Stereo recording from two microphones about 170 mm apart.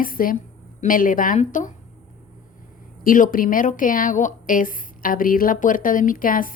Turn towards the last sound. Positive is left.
turn(degrees=55)  # may be behind; listen again after turning